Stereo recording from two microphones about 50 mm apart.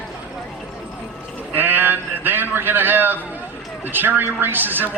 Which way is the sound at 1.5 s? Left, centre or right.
Right.